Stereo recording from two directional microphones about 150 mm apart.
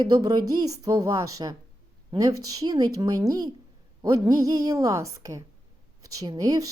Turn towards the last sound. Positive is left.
turn(degrees=-25)  # may be behind; listen again after turning